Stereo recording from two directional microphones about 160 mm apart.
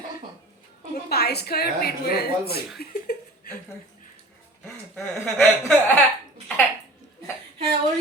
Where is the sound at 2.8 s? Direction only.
70° left (ahead or behind).